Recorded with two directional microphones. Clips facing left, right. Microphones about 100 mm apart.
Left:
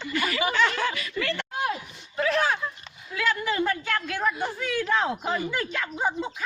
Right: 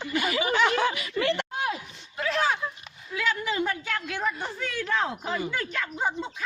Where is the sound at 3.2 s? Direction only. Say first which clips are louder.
Left 2 dB; centre (ahead or behind).